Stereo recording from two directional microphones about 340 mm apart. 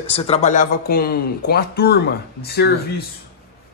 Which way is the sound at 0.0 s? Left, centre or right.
Centre.